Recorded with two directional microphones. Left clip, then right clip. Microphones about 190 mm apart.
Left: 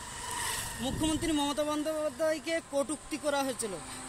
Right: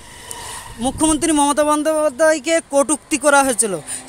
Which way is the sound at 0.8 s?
35° right (ahead or behind).